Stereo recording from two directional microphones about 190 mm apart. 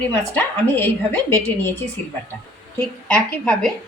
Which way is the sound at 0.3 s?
10° left (ahead or behind).